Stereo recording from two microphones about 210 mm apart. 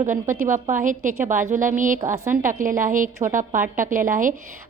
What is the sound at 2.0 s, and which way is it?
Speech, 15° right (ahead or behind).